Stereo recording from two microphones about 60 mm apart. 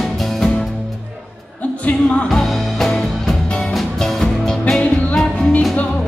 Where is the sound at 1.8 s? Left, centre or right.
Left.